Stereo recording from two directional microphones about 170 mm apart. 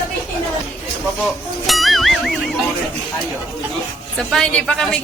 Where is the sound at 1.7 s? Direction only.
Centre (ahead or behind).